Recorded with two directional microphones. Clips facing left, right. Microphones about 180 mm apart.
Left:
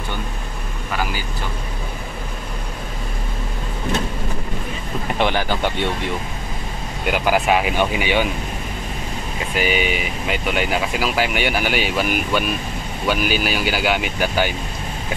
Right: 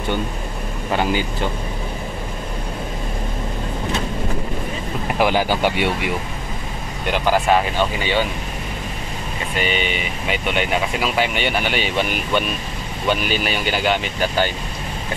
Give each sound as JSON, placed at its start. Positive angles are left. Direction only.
{"t": 0.9, "sound": "speech", "side_deg": -25}
{"t": 5.2, "sound": "speech", "side_deg": -10}
{"t": 7.1, "sound": "speech", "side_deg": 10}
{"t": 9.6, "sound": "speech", "side_deg": 5}